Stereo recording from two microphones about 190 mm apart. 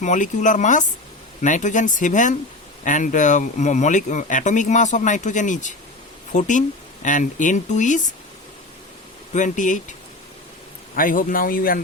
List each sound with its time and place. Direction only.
0.0 s speech: 40° left (ahead or behind)
9.3 s speech: 40° left (ahead or behind)
10.9 s speech: 45° left (ahead or behind)